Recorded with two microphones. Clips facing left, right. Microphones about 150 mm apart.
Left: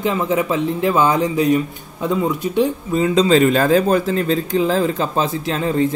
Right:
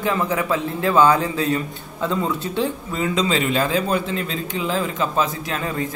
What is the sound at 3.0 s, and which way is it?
Speech, 35° left (ahead or behind).